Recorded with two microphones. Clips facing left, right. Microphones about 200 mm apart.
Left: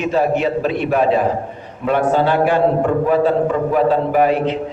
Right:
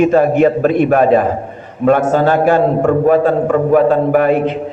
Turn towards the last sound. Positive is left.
turn(degrees=-50)  # may be behind; listen again after turning